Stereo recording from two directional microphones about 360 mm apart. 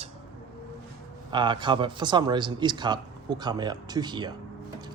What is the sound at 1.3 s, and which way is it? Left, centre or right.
Speech, centre.